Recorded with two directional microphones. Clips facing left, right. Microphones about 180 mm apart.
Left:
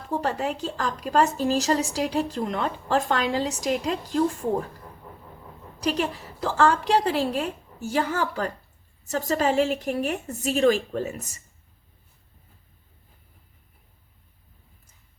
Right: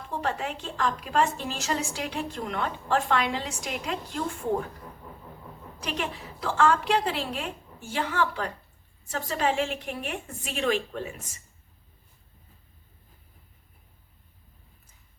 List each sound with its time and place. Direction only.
0.1 s a woman's voice: 40° left (ahead or behind)
5.8 s a woman's voice: 35° left (ahead or behind)